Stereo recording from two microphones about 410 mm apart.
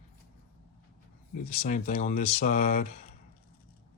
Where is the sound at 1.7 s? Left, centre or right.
Centre.